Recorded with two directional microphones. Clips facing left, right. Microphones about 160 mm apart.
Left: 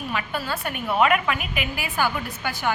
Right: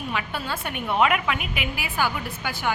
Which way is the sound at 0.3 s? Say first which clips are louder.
Left 2 dB; centre (ahead or behind).